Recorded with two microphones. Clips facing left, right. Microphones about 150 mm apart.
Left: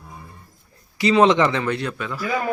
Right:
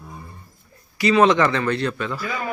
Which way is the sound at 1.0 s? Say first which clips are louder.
Even; 25° left (ahead or behind).